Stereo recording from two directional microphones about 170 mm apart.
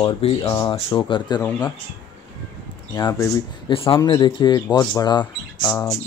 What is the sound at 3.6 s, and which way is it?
Speech, 30° left (ahead or behind).